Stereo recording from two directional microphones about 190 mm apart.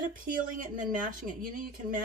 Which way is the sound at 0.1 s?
45° right (ahead or behind).